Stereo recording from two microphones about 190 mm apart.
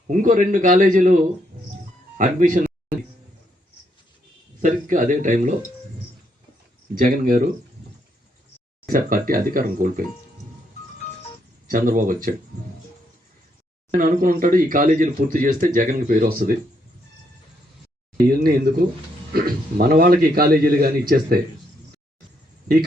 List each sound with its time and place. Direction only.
0.1 s a man's voice: 40° right (ahead or behind)
4.6 s a man's voice: 45° right (ahead or behind)
6.9 s speech: 45° right (ahead or behind)
8.9 s speech: 45° right (ahead or behind)
11.7 s speech: 45° right (ahead or behind)
13.9 s speech: 45° right (ahead or behind)
18.3 s speech: 50° right (ahead or behind)